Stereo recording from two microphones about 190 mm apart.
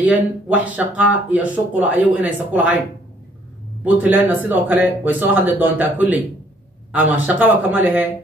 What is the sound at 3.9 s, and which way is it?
Speech, 10° right (ahead or behind).